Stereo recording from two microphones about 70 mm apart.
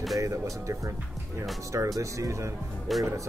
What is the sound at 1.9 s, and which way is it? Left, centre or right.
Speech, right.